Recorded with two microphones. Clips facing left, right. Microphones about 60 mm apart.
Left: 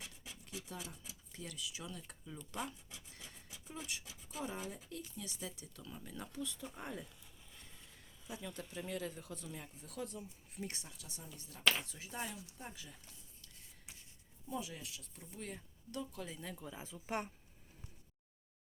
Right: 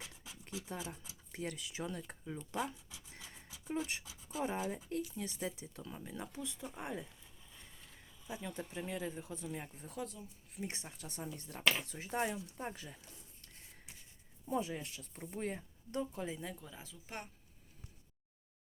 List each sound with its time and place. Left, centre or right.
0.5 s speech: right
2.0 s a sound: right
4.7 s speech: right; by 7.1 s centre
8.3 s speech: right
10.0 s speech: centre
10.7 s speech: right
10.9 s speech: right
14.4 s speech: right
16.6 s speech: centre
16.8 s speech: left